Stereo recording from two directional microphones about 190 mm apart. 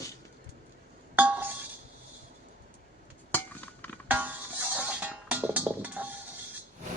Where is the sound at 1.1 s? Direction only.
10° right (ahead or behind).